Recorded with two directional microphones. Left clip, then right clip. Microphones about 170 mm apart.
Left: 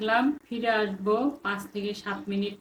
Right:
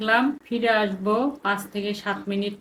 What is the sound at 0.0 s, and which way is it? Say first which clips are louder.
A woman's voice: right 4 dB; 60° right (ahead or behind).